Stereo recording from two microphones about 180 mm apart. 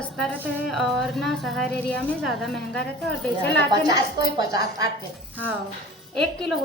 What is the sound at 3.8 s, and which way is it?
A woman's voice, 20° right (ahead or behind).